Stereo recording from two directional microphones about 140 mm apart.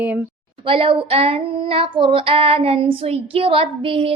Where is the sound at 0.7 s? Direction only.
40° right (ahead or behind).